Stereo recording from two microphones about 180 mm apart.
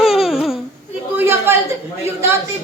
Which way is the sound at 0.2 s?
Centre (ahead or behind).